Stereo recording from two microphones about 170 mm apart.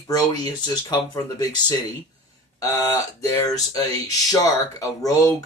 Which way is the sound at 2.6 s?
15° left (ahead or behind).